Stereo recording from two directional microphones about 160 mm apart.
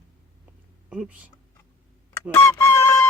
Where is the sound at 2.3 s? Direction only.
20° left (ahead or behind).